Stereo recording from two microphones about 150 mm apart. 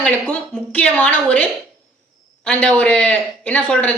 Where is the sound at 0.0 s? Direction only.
10° left (ahead or behind).